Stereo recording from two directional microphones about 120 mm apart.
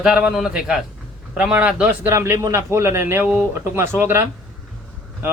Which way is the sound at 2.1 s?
20° right (ahead or behind).